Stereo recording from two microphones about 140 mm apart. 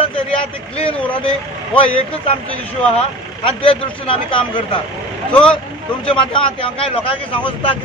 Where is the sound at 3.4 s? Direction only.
40° left (ahead or behind).